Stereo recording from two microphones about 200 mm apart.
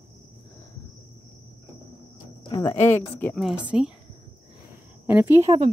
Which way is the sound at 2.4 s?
15° left (ahead or behind).